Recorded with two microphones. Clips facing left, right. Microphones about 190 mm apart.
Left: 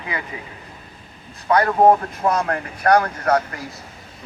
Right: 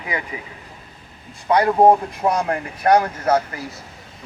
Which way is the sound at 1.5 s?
15° right (ahead or behind).